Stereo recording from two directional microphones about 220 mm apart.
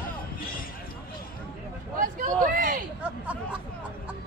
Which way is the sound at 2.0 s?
40° right (ahead or behind).